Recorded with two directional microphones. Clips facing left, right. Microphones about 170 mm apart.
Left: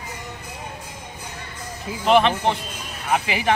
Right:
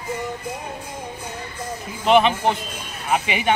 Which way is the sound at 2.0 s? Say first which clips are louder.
Right 1 dB; centre (ahead or behind).